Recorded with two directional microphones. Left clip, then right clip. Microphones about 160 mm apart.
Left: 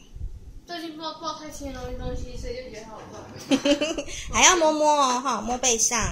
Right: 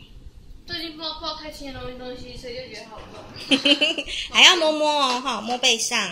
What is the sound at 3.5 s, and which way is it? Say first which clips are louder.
Speech: right 4 dB; 10° left (ahead or behind).